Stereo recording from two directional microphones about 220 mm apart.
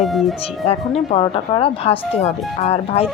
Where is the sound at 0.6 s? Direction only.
30° left (ahead or behind).